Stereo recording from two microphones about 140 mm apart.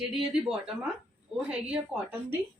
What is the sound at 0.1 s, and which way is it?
Speech, 5° right (ahead or behind).